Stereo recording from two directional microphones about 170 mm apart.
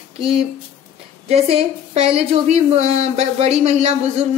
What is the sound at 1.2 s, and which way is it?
A woman's voice, 35° right (ahead or behind).